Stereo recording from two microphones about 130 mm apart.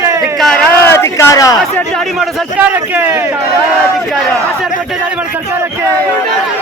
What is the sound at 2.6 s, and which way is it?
Speech, 15° right (ahead or behind).